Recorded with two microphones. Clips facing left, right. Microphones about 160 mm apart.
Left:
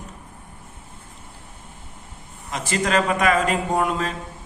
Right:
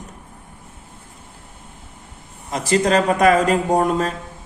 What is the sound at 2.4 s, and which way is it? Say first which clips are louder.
A man's voice: right 6 dB; 35° right (ahead or behind).